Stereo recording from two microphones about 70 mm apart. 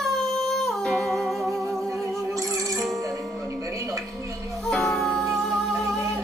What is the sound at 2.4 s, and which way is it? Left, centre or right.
Music, right.